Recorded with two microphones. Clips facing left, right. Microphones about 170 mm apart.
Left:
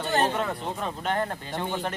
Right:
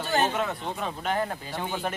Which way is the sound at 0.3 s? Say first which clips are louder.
Left 1 dB; centre (ahead or behind).